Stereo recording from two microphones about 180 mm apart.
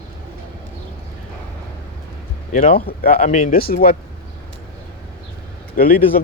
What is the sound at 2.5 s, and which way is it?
Speech, 45° left (ahead or behind).